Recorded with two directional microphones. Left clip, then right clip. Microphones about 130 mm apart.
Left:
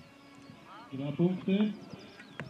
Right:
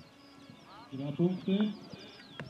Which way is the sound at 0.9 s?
5° right (ahead or behind).